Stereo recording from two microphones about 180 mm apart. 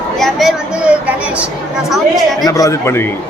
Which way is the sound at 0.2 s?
Centre (ahead or behind).